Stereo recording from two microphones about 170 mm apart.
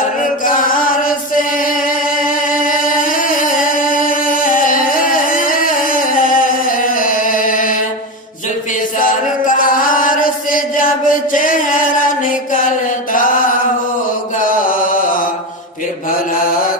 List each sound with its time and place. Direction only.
0.2 s music: 55° left (ahead or behind)
2.2 s music: 55° left (ahead or behind)
9.0 s chant: 55° left (ahead or behind)
14.4 s chant: 55° left (ahead or behind)